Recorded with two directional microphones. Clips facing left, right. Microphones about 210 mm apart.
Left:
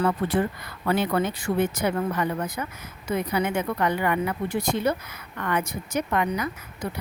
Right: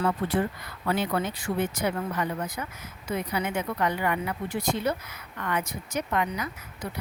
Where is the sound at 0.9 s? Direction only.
60° left (ahead or behind).